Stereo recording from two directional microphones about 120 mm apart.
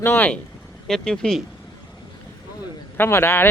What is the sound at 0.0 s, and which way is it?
Speech, 15° left (ahead or behind).